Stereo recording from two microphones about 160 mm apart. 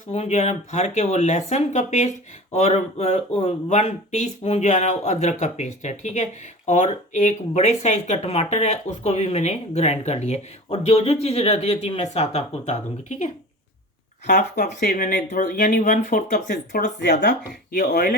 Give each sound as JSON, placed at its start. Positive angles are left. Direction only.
{"t": 0.1, "sound": "speech", "side_deg": 45}
{"t": 17.0, "sound": "speech", "side_deg": 90}